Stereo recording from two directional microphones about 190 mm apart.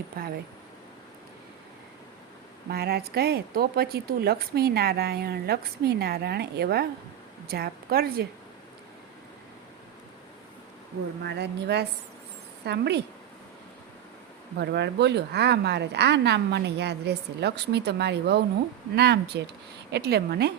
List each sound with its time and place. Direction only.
0.1 s a woman's voice: 50° right (ahead or behind)
2.6 s a woman's voice: 55° right (ahead or behind)
11.2 s speech: 60° right (ahead or behind)
14.6 s speech: 60° right (ahead or behind)